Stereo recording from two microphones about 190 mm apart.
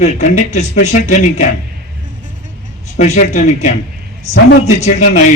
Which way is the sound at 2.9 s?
35° left (ahead or behind).